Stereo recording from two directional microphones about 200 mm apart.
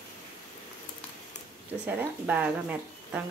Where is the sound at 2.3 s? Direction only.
5° right (ahead or behind).